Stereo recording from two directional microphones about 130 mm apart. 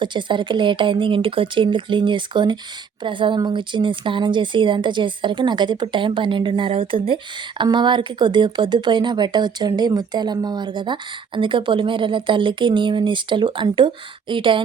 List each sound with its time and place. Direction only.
0.0 s speech: 35° right (ahead or behind)